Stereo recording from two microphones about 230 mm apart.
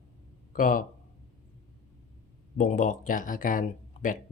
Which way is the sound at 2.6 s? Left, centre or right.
Left.